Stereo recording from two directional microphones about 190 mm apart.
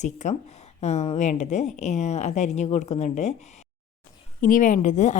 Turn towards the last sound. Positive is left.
turn(degrees=40)  # may be behind; listen again after turning